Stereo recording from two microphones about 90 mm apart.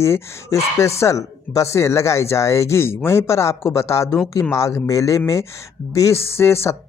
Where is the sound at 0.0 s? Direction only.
35° left (ahead or behind).